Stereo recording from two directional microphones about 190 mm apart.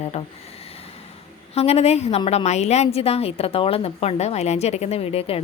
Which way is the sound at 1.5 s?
35° left (ahead or behind).